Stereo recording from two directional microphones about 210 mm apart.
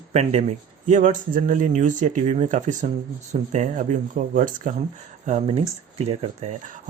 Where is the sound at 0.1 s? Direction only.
30° right (ahead or behind).